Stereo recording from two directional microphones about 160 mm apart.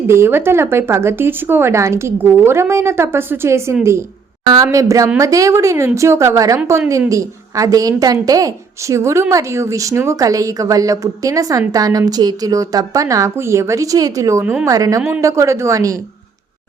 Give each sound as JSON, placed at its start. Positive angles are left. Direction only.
{"t": 0.1, "sound": "a woman's voice", "side_deg": -15}